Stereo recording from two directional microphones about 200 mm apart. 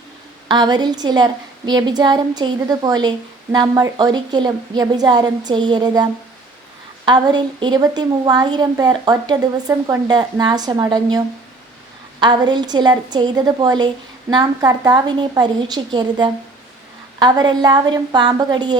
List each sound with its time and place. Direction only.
0.4 s a woman's voice: 20° right (ahead or behind)
12.2 s a woman's voice: 20° right (ahead or behind)